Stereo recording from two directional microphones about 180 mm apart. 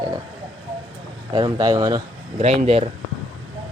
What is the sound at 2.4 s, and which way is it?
Speech, 35° right (ahead or behind).